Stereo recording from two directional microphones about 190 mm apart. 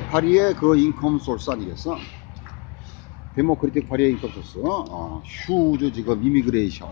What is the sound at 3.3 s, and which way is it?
Speech, 5° left (ahead or behind).